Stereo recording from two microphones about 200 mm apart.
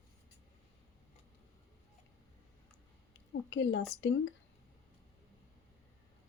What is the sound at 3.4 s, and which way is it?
Speech, 65° left (ahead or behind).